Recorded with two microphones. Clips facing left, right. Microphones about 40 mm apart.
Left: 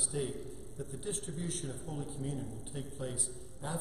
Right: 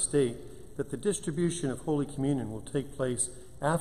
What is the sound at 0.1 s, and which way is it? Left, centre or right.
Speech, right.